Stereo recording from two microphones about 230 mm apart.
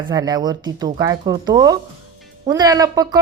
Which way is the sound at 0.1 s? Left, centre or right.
Centre.